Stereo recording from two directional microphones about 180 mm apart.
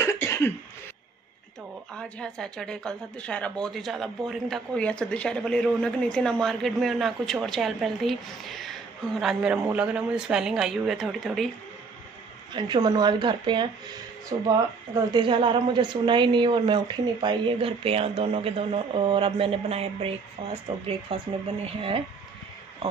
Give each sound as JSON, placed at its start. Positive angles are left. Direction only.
{"t": 0.0, "sound": "cough", "side_deg": 15}
{"t": 2.0, "sound": "a woman's voice", "side_deg": 5}
{"t": 12.5, "sound": "a woman's voice", "side_deg": -25}